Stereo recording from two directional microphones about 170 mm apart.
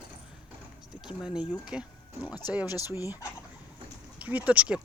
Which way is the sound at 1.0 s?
5° right (ahead or behind).